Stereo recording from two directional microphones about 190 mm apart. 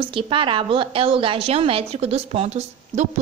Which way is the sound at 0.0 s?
25° right (ahead or behind).